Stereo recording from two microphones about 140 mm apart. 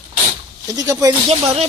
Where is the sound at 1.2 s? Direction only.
45° right (ahead or behind).